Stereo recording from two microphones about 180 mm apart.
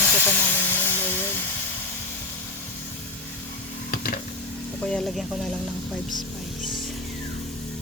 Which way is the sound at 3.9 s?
55° left (ahead or behind).